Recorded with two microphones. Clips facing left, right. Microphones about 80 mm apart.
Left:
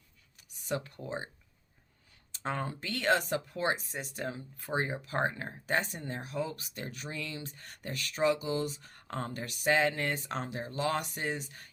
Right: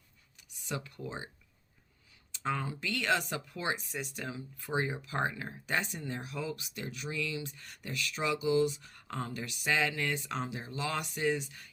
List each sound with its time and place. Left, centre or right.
0.7 s speech: left
2.3 s speech: left